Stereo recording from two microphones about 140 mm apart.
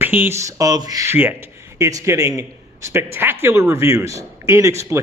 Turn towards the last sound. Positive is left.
turn(degrees=-20)  # may be behind; listen again after turning